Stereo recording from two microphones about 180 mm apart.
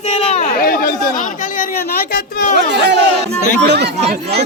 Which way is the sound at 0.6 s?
55° left (ahead or behind).